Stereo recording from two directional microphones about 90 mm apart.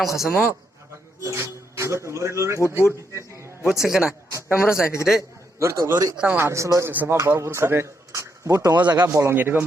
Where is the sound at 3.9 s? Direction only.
10° right (ahead or behind).